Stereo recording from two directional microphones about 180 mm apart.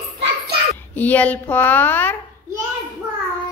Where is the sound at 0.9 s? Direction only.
10° left (ahead or behind).